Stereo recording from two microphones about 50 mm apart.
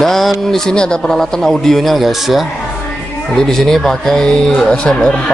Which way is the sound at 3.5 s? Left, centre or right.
Centre.